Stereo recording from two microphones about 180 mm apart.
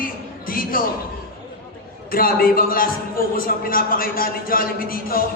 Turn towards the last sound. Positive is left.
turn(degrees=55)  # may be behind; listen again after turning